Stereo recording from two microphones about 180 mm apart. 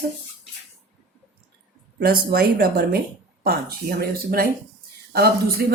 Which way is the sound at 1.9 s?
55° right (ahead or behind).